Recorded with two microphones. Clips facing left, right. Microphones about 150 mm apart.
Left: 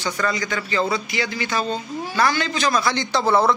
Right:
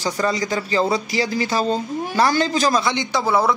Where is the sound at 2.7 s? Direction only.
20° right (ahead or behind).